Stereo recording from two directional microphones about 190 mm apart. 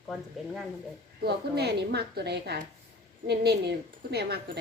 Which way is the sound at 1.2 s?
60° right (ahead or behind).